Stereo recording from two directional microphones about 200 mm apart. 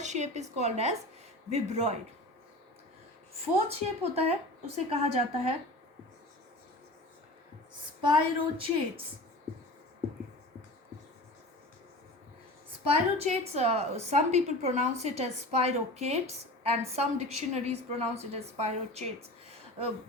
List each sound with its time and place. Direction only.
0.0 s a woman's voice: 35° right (ahead or behind)
3.7 s a woman's voice: 30° right (ahead or behind)
8.0 s speech: 25° right (ahead or behind)
12.8 s a woman's voice: 30° right (ahead or behind)
19.5 s a sound: 30° right (ahead or behind)